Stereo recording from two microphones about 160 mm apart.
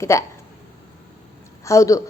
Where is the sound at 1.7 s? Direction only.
20° left (ahead or behind).